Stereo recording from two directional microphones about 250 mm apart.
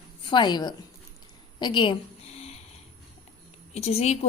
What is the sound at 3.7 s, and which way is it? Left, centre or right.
Speech, left.